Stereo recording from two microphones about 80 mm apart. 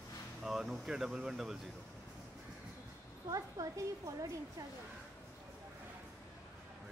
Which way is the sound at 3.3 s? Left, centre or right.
Right.